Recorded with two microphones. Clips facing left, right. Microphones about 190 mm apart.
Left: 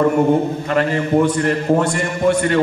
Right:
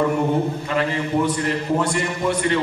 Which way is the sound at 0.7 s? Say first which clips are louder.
Left 6 dB; 50° left (ahead or behind).